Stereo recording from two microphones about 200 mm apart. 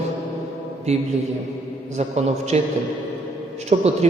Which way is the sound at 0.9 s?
35° right (ahead or behind).